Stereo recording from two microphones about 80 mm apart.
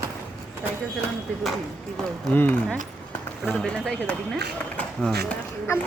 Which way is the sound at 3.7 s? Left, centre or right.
Centre.